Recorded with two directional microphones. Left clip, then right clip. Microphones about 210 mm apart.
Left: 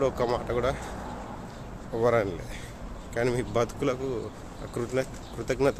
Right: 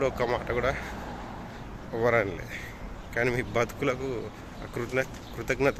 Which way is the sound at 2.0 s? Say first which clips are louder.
Left 1 dB; 10° left (ahead or behind).